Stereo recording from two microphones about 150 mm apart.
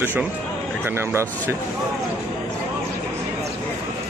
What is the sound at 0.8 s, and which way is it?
Speech, 15° right (ahead or behind).